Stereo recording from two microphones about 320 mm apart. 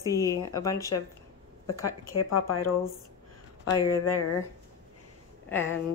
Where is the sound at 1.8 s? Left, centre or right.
Left.